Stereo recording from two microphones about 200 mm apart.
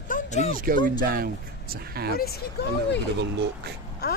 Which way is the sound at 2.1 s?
50° left (ahead or behind).